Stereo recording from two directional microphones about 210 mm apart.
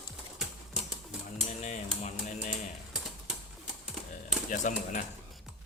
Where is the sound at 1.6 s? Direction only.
35° left (ahead or behind).